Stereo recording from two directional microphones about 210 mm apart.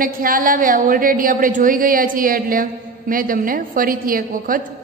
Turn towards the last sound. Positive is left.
turn(degrees=-40)  # may be behind; listen again after turning